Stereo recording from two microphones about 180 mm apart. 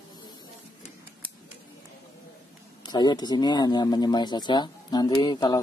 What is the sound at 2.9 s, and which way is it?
Speech, 25° left (ahead or behind).